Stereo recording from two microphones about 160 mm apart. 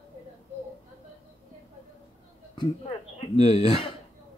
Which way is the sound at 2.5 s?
35° left (ahead or behind).